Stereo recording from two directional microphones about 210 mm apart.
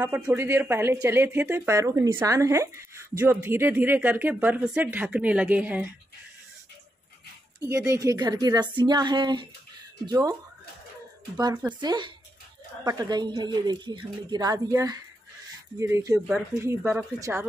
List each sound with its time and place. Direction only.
0.0 s speech: 10° right (ahead or behind)
7.6 s speech: 15° right (ahead or behind)
11.3 s speech: 20° right (ahead or behind)